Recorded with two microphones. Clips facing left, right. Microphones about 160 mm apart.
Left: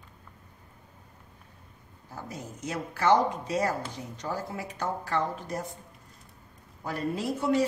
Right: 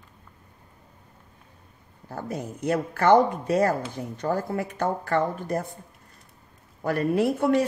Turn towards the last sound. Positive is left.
turn(degrees=-60)  # may be behind; listen again after turning